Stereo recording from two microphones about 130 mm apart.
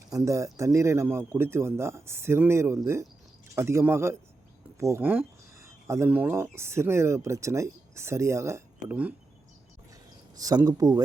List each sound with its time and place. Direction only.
0.1 s speech: 25° right (ahead or behind)
9.9 s a sound: 25° right (ahead or behind)
10.7 s speech: 30° right (ahead or behind)